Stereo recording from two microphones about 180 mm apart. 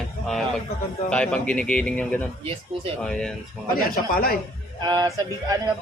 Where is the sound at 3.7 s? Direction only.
55° left (ahead or behind).